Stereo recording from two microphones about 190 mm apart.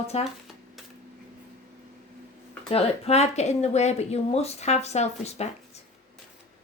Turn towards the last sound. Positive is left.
turn(degrees=35)  # may be behind; listen again after turning